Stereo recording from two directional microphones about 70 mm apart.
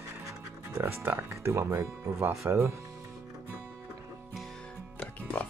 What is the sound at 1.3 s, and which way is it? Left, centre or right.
Speech, right.